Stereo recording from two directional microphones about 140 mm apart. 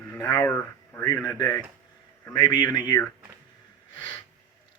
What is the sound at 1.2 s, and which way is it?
Speech, 30° left (ahead or behind).